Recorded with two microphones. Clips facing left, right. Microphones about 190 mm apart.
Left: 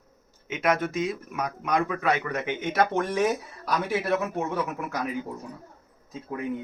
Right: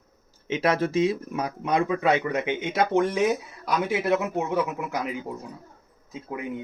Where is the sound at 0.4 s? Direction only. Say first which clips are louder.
Right 2 dB; 30° right (ahead or behind).